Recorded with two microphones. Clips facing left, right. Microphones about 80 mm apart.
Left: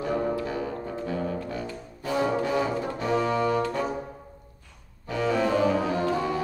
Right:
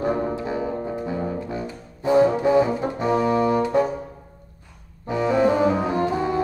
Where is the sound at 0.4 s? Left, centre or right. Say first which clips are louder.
Right 4 dB; right.